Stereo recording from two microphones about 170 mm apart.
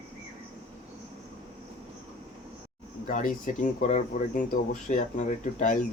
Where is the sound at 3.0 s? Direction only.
50° left (ahead or behind).